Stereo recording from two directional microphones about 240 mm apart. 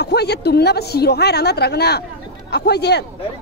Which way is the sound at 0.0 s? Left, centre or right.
Left.